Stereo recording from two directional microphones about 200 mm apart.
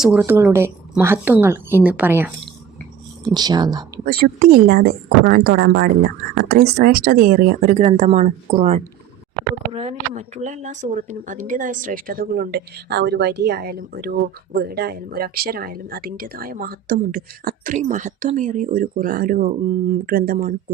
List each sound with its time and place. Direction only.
0.0 s speech: 10° right (ahead or behind)
3.2 s speech: 20° right (ahead or behind)
4.0 s speech: 50° right (ahead or behind)
5.5 s speech: 60° right (ahead or behind)